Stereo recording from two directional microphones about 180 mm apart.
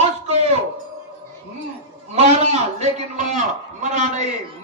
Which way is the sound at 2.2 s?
35° right (ahead or behind).